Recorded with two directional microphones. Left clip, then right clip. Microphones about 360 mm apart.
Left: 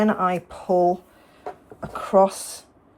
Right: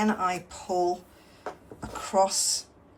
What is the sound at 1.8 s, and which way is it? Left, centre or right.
Speech, centre.